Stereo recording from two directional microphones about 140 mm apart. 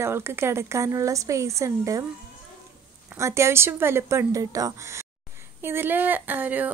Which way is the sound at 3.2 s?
20° right (ahead or behind).